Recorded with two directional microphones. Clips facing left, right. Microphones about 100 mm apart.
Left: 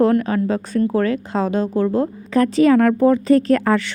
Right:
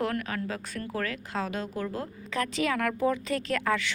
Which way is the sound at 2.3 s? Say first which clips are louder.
Left 15 dB; 40° left (ahead or behind).